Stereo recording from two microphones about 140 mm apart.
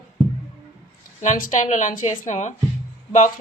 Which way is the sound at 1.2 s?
75° left (ahead or behind).